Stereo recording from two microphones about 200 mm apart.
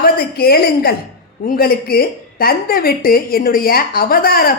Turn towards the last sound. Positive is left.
turn(degrees=50)  # may be behind; listen again after turning